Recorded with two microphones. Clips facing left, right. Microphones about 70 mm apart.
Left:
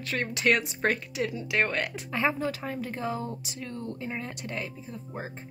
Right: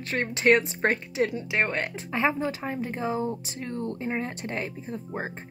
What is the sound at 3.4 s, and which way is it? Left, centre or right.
Speech, right.